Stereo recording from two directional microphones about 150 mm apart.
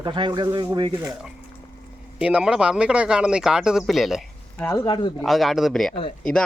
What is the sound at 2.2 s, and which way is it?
Speech, 5° right (ahead or behind).